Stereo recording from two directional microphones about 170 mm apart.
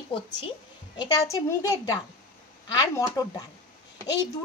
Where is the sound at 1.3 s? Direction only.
20° left (ahead or behind).